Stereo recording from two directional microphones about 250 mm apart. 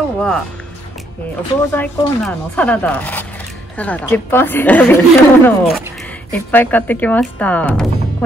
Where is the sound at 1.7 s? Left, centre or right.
Centre.